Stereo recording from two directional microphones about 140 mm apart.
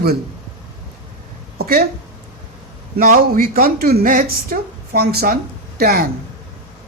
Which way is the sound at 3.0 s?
75° right (ahead or behind).